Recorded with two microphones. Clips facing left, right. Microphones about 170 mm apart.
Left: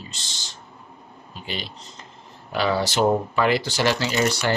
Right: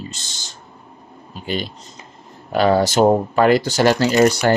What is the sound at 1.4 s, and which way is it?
Speech, 45° right (ahead or behind).